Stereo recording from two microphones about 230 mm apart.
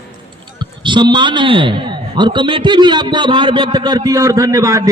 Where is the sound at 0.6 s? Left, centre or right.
Centre.